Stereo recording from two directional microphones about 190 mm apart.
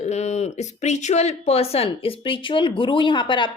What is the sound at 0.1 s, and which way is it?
Speech, 35° left (ahead or behind).